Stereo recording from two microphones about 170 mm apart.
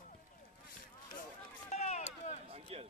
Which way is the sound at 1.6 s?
40° left (ahead or behind).